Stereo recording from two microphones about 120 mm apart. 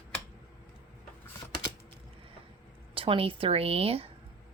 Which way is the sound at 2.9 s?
50° right (ahead or behind).